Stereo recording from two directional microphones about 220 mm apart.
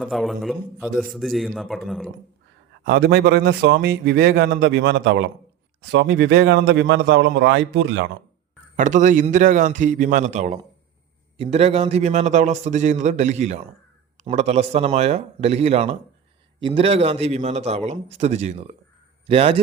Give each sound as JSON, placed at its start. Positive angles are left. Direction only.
{"t": 0.0, "sound": "a man's voice", "side_deg": 0}
{"t": 2.8, "sound": "a man's voice", "side_deg": -45}
{"t": 8.7, "sound": "a man's voice", "side_deg": -35}